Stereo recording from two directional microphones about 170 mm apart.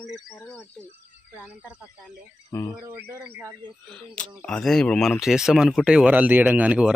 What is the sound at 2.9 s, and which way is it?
Speech, 10° right (ahead or behind).